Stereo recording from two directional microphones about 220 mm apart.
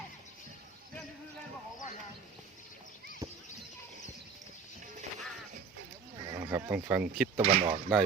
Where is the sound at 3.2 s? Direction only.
15° right (ahead or behind).